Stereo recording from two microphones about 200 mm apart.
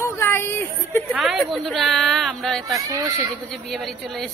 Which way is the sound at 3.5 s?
Centre (ahead or behind).